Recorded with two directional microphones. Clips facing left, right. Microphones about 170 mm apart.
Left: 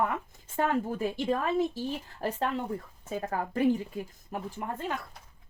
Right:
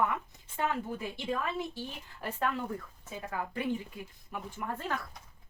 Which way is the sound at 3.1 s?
45° left (ahead or behind).